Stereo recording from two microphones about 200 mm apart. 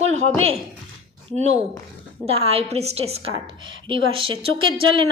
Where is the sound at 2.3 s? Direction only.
30° right (ahead or behind).